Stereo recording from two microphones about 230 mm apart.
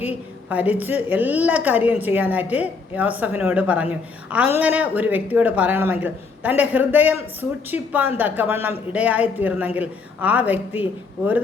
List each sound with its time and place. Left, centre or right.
0.0 s a woman's voice: centre